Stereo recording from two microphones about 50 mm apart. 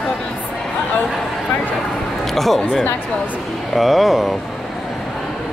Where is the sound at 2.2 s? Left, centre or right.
Centre.